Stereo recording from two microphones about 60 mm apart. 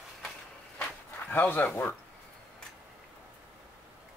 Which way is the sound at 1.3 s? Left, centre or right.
Left.